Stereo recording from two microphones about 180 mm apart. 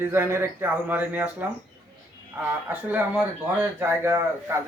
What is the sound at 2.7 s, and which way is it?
Speech, 10° right (ahead or behind).